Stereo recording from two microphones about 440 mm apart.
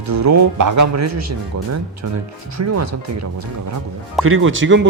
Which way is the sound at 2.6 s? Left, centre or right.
Right.